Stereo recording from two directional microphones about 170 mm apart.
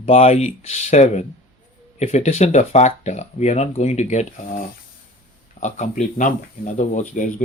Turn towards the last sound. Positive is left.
turn(degrees=45)  # may be behind; listen again after turning